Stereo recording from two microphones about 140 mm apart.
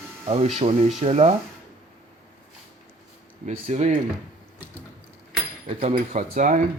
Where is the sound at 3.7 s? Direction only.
55° right (ahead or behind).